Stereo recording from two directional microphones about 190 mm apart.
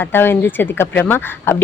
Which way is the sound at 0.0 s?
10° left (ahead or behind).